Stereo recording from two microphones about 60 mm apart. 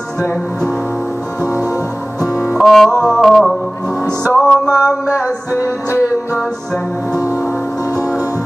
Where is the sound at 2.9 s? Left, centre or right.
Right.